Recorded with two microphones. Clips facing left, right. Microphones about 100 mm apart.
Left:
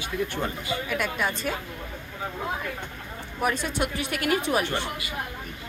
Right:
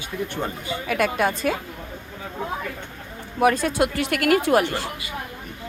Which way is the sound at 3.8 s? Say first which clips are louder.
Right 7 dB; 85° right.